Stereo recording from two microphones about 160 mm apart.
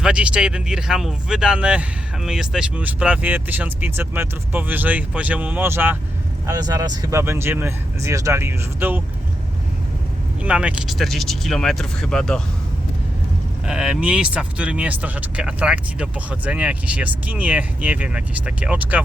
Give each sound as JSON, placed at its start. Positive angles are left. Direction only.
{"t": 0.0, "sound": "speech", "side_deg": -5}
{"t": 6.5, "sound": "speech", "side_deg": -25}
{"t": 10.4, "sound": "speech", "side_deg": -10}
{"t": 13.7, "sound": "speech", "side_deg": -5}